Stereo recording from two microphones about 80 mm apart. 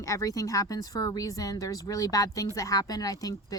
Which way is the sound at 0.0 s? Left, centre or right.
Left.